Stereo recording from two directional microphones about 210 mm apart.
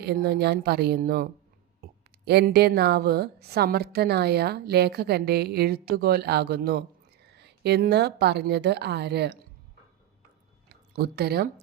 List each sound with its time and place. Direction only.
0.0 s speech: 50° right (ahead or behind)
10.9 s speech: 50° right (ahead or behind)